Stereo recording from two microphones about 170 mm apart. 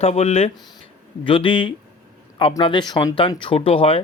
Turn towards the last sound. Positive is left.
turn(degrees=35)  # may be behind; listen again after turning